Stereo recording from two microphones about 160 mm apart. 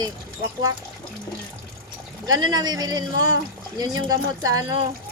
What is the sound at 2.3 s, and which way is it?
Speech, 25° right (ahead or behind).